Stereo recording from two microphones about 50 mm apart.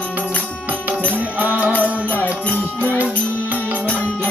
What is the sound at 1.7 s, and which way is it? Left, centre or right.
Music, left.